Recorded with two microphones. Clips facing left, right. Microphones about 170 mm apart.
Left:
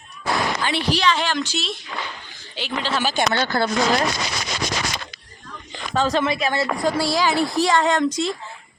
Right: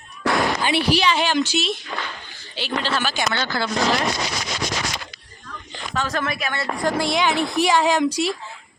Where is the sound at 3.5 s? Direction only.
50° left (ahead or behind).